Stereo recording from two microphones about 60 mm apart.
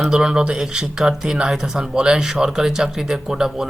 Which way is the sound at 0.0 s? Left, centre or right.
Centre.